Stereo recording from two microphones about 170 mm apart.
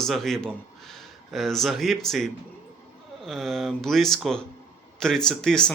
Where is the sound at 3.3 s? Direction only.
Centre (ahead or behind).